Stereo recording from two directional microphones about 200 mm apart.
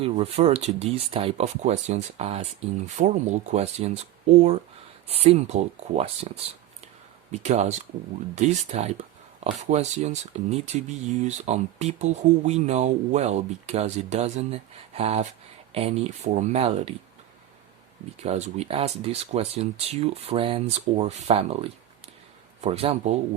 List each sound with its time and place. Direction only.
0.0 s speech: 30° right (ahead or behind)
5.0 s speech: 30° right (ahead or behind)
6.8 s a sound: 35° right (ahead or behind)
8.4 s speech: 35° right (ahead or behind)
18.2 s speech: 35° right (ahead or behind)